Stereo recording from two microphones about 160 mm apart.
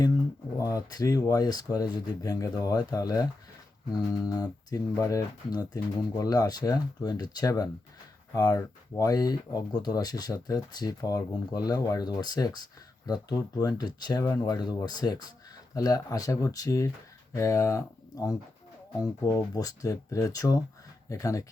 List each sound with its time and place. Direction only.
0.5 s speech: 20° left (ahead or behind)
4.7 s speech: 20° left (ahead or behind)